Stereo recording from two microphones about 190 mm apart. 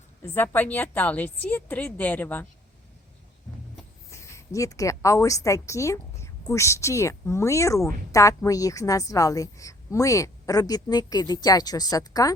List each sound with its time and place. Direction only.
0.2 s a woman's voice: 10° left (ahead or behind)
4.1 s a woman's voice: 15° left (ahead or behind)